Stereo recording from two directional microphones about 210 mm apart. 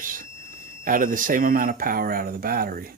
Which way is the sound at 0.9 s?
40° right (ahead or behind).